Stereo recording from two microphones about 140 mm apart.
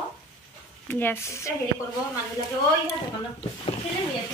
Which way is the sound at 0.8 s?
15° left (ahead or behind).